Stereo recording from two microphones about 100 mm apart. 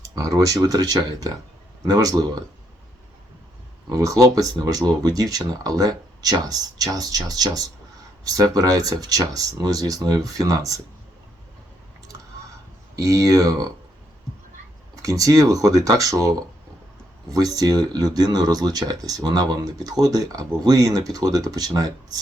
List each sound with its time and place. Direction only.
0.2 s speech: 35° right (ahead or behind)
3.9 s speech: 35° right (ahead or behind)
13.0 s speech: 35° right (ahead or behind)
15.0 s speech: 35° right (ahead or behind)
17.3 s speech: 35° right (ahead or behind)